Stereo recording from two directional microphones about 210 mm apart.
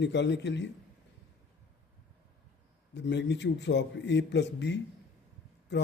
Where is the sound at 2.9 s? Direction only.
55° left (ahead or behind).